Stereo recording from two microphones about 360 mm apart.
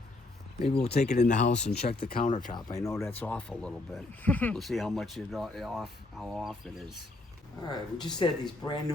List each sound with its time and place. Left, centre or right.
0.8 s speech: left; by 6.8 s centre
7.7 s speech: centre